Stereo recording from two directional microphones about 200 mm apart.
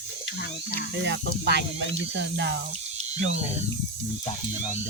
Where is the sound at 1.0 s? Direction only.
60° right (ahead or behind).